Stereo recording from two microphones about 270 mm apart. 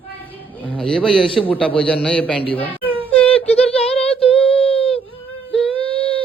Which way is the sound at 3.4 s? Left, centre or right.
Left.